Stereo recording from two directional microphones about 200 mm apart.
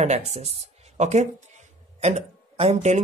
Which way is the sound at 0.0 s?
35° right (ahead or behind).